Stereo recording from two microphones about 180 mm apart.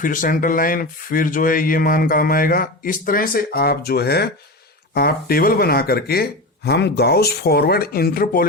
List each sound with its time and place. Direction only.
0.0 s speech: 50° left (ahead or behind)